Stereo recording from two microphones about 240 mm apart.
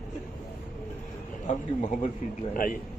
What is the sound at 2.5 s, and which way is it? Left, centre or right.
Speech, left.